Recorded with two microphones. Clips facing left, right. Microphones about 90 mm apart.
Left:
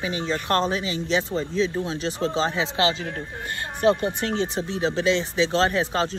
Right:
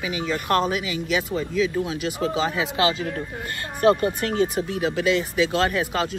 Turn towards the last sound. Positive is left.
turn(degrees=30)  # may be behind; listen again after turning